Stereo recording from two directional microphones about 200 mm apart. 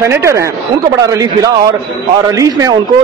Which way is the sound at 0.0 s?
15° right (ahead or behind).